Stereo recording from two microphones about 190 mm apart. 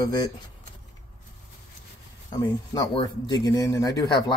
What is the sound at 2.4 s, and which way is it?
Speech, 20° left (ahead or behind).